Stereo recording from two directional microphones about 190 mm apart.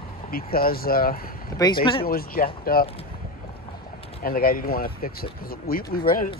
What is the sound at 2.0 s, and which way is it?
Speech, 50° left (ahead or behind).